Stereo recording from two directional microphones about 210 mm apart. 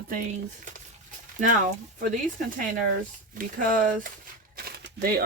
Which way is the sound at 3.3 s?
40° right (ahead or behind).